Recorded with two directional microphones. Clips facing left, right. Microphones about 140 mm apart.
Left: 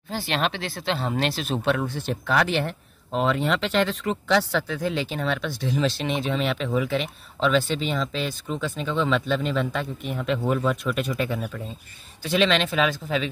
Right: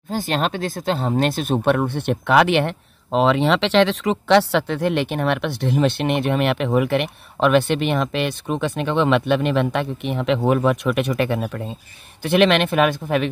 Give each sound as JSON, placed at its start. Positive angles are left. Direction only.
{"t": 0.1, "sound": "speech", "side_deg": -45}